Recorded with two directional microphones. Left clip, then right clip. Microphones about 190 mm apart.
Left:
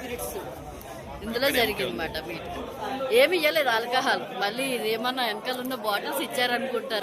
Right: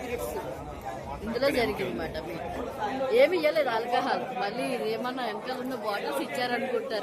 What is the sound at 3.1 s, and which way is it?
A woman's voice, centre (ahead or behind).